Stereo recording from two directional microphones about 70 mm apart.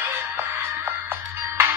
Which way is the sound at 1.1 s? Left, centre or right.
Right.